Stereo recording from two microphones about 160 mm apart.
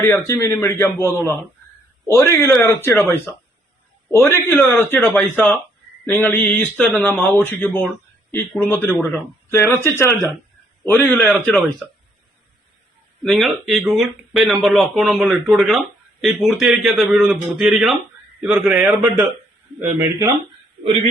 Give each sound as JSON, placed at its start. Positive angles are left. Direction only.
{"t": 0.0, "sound": "a man's voice", "side_deg": 20}
{"t": 13.2, "sound": "speech", "side_deg": 0}